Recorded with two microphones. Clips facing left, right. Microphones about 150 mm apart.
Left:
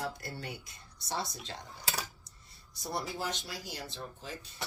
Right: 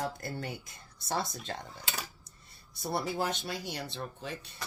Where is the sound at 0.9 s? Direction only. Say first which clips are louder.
Right 3 dB; 55° right (ahead or behind).